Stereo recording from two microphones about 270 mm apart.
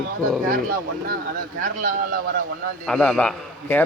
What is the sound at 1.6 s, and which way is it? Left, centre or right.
Speech, right.